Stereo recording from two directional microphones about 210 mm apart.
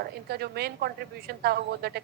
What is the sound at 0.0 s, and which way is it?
A woman's voice, 50° right (ahead or behind).